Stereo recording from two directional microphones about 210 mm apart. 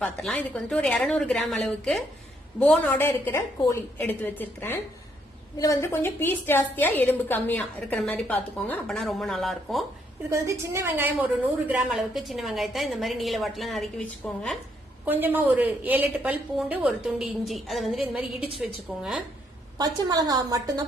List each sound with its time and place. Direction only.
0.0 s a woman's voice: 5° left (ahead or behind)
10.2 s a woman's voice: 15° right (ahead or behind); by 14.4 s 5° left (ahead or behind)
15.0 s a woman's voice: 10° right (ahead or behind)
19.8 s a woman's voice: 20° right (ahead or behind)